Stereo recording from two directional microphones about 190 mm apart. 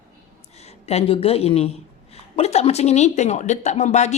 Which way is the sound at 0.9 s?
30° left (ahead or behind).